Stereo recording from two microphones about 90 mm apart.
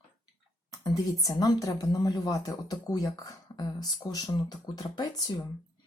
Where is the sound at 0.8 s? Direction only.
45° left (ahead or behind).